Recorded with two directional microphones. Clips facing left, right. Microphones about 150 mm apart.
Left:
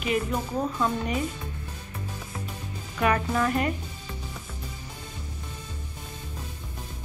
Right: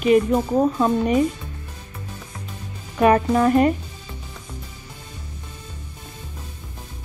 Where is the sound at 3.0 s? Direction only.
30° right (ahead or behind).